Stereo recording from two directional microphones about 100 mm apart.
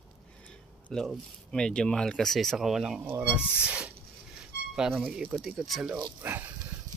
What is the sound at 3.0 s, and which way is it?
Speech, 20° right (ahead or behind).